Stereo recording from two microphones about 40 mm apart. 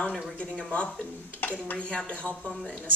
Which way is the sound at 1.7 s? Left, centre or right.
Left.